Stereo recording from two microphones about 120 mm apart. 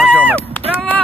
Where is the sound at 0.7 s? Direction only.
15° left (ahead or behind).